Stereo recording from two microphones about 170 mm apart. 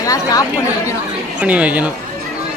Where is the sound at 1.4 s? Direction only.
10° right (ahead or behind).